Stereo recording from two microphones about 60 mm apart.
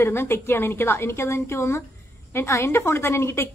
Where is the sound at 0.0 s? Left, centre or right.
Left.